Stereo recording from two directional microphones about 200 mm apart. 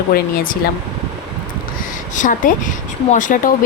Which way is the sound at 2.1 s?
40° left (ahead or behind).